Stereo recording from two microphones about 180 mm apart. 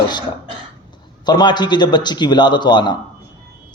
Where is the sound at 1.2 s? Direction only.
25° left (ahead or behind).